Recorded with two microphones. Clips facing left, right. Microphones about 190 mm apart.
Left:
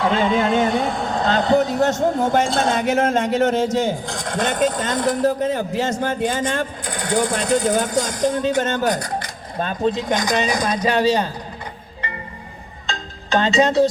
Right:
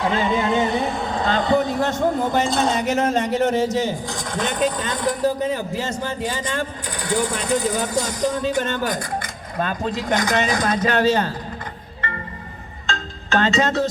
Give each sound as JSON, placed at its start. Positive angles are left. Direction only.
{"t": 0.2, "sound": "a man's voice", "side_deg": 50}
{"t": 9.6, "sound": "speech", "side_deg": 20}
{"t": 12.9, "sound": "music", "side_deg": 15}